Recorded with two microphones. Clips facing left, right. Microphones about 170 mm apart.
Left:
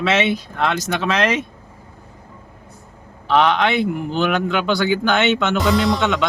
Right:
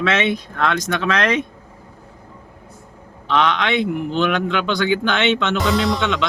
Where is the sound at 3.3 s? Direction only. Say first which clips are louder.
Left 2 dB; 5° left (ahead or behind).